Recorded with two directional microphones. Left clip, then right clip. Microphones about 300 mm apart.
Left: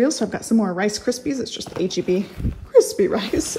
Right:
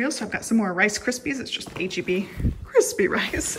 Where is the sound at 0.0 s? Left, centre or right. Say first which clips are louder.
Left 6 dB; centre.